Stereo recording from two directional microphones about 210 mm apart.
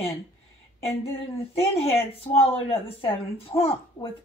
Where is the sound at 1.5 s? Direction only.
25° left (ahead or behind).